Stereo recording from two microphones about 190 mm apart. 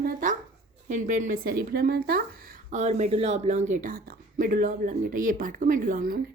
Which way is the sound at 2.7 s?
35° right (ahead or behind).